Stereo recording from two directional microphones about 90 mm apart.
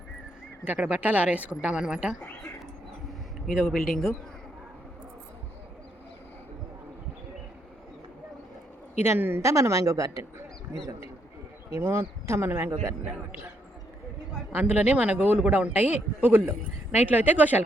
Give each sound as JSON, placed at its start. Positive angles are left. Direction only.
{"t": 0.6, "sound": "speech", "side_deg": -20}
{"t": 3.4, "sound": "speech", "side_deg": 0}
{"t": 9.0, "sound": "a man's voice", "side_deg": -25}
{"t": 9.4, "sound": "a woman's voice", "side_deg": -35}
{"t": 11.7, "sound": "a man's voice", "side_deg": -30}
{"t": 14.5, "sound": "a man's voice", "side_deg": -15}